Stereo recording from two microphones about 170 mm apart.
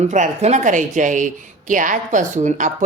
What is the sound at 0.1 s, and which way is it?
A woman's voice, 45° right (ahead or behind).